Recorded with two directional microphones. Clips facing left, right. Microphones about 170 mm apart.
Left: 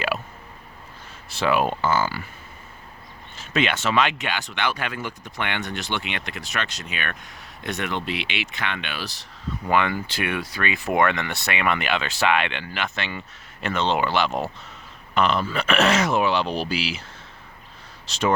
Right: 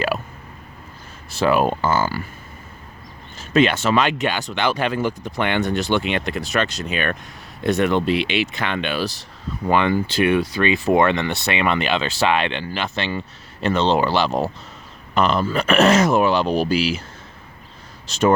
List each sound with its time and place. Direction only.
1.3 s speech: 45° right (ahead or behind)
3.3 s speech: 40° right (ahead or behind)
18.0 s speech: 50° right (ahead or behind)